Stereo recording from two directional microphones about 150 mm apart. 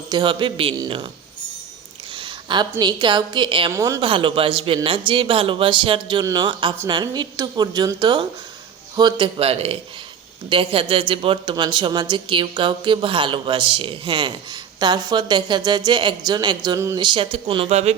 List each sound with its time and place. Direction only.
0.1 s speech: 30° right (ahead or behind)
2.1 s a woman's voice: 35° right (ahead or behind)
3.8 s speech: 20° right (ahead or behind)
4.0 s speech: 35° right (ahead or behind)